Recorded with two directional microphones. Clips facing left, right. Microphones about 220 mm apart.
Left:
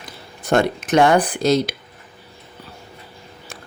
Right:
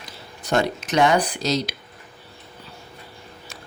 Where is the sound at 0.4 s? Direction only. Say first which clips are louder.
Left 4 dB; 55° left (ahead or behind).